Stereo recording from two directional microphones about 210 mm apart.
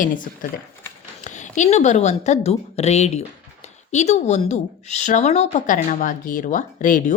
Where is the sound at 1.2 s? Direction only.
35° left (ahead or behind).